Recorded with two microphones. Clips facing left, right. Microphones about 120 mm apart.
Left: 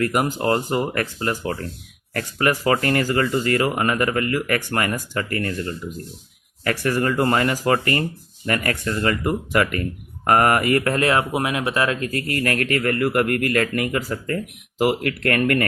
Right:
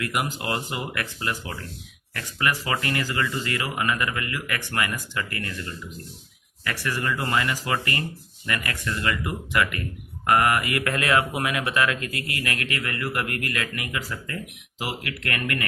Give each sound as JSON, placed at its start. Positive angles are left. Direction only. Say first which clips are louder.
{"t": 0.0, "sound": "speech", "louder": "left 7 dB", "side_deg": 40}